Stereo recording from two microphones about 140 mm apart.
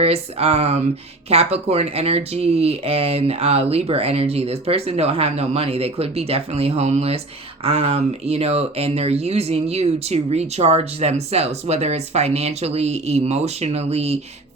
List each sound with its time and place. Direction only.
0.0 s speech: 45° right (ahead or behind)